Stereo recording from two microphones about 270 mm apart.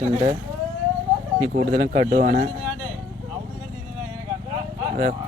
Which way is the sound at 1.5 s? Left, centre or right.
Right.